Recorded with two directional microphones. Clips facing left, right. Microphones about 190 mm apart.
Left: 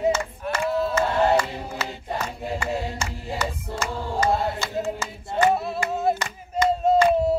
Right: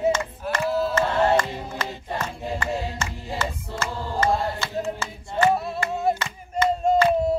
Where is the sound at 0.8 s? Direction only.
5° left (ahead or behind).